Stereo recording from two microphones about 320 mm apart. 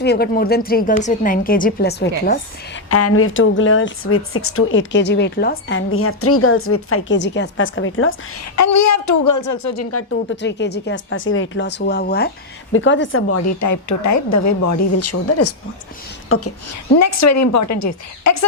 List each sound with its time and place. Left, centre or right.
0.0 s speech: left
2.9 s speech: left
8.5 s speech: left
10.1 s a woman's voice: left
17.0 s speech: left